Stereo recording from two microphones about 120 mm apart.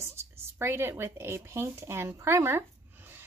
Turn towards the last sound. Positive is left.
turn(degrees=-20)  # may be behind; listen again after turning